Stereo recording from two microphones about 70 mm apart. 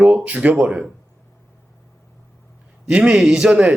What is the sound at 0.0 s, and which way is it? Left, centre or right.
Speech, centre.